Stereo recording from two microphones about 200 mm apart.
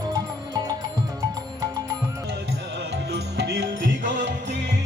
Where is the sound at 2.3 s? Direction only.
55° right (ahead or behind).